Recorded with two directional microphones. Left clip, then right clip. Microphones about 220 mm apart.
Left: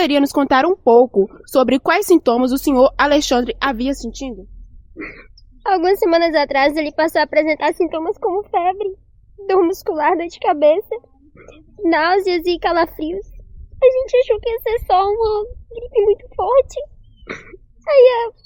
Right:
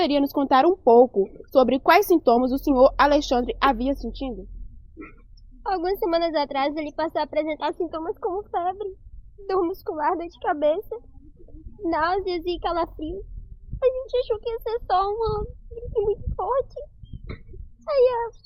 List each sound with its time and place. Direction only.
0.0 s a woman's voice: 30° left (ahead or behind)
4.9 s a sound: 45° left (ahead or behind)
5.6 s a woman's voice: 40° left (ahead or behind)
17.8 s a woman's voice: 40° left (ahead or behind)